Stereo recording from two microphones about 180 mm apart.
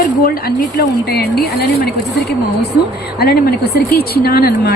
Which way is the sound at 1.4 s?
60° left (ahead or behind).